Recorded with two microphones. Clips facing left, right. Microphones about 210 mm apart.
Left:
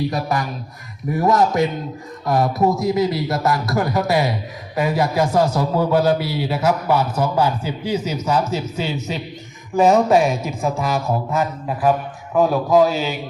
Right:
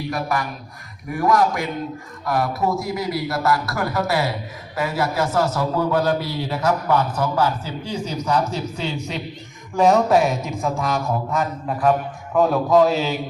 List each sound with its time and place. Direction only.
0.1 s a man's voice: 20° left (ahead or behind); by 13.1 s centre (ahead or behind)